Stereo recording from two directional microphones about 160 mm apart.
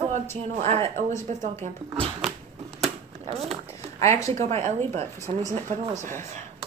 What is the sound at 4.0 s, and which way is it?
Speech, 20° left (ahead or behind).